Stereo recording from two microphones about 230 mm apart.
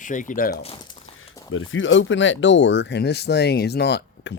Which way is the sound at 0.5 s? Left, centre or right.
Left.